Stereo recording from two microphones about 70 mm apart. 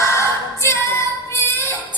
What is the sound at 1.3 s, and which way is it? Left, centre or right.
Female singing, left.